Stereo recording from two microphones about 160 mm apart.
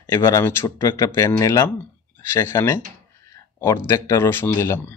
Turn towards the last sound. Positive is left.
turn(degrees=15)  # may be behind; listen again after turning